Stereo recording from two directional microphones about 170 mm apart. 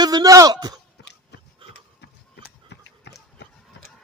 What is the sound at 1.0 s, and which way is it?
Biting, 90° left.